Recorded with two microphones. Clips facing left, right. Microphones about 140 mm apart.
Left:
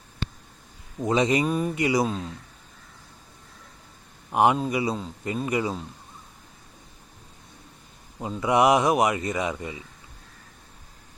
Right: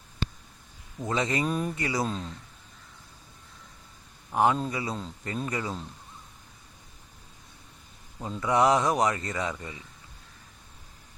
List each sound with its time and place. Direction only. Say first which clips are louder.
0.9 s speech: left 6 dB; 15° left (ahead or behind)
1.5 s a sound: left 4 dB; 5° left (ahead or behind)
1.7 s speech: left 6 dB; 15° left (ahead or behind)
4.3 s speech: left 3 dB; 20° left (ahead or behind)
8.2 s speech: left 3 dB; 15° left (ahead or behind)